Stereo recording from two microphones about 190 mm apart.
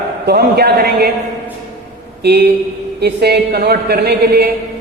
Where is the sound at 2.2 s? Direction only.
60° right (ahead or behind).